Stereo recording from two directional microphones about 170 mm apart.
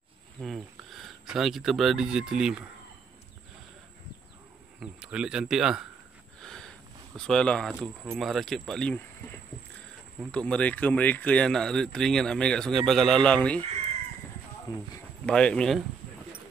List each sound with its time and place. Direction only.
0.4 s speech: centre (ahead or behind)
4.7 s speech: 5° right (ahead or behind)
6.4 s a sound: 5° left (ahead or behind)
7.2 s speech: 5° left (ahead or behind)
10.3 s speech: 5° left (ahead or behind)
14.7 s speech: 25° left (ahead or behind)
15.2 s speech: 5° left (ahead or behind)